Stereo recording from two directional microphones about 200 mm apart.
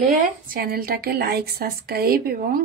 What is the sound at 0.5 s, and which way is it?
A woman's voice, 45° right (ahead or behind).